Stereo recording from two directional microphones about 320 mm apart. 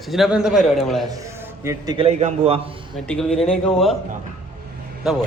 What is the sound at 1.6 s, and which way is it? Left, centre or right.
Speech, centre.